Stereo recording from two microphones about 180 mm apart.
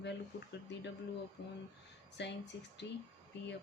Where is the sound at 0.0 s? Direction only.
70° left (ahead or behind).